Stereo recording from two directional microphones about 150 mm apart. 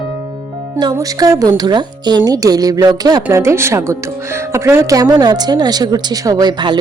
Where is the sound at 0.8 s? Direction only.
25° right (ahead or behind).